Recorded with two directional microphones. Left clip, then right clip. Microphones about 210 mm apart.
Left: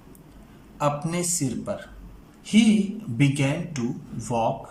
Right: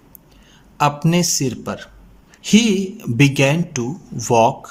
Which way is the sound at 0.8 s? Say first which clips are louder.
Right 8 dB; 40° right (ahead or behind).